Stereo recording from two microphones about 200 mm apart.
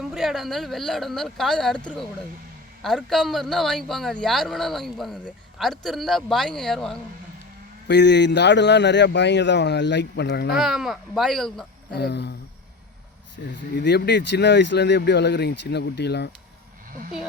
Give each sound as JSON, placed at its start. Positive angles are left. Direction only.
{"t": 0.0, "sound": "a man's voice", "side_deg": 0}
{"t": 2.8, "sound": "a man's voice", "side_deg": 0}
{"t": 7.9, "sound": "speech", "side_deg": 60}
{"t": 10.6, "sound": "a man's voice", "side_deg": 0}
{"t": 11.9, "sound": "speech", "side_deg": 55}